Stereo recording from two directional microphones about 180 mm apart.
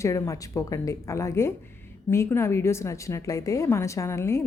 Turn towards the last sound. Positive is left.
turn(degrees=15)  # may be behind; listen again after turning